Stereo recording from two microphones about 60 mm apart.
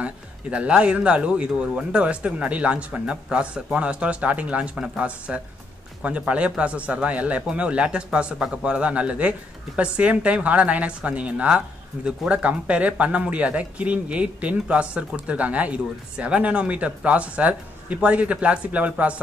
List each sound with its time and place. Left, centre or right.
0.0 s speech: right